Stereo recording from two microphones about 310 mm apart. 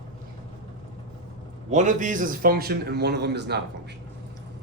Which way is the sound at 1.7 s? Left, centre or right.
Right.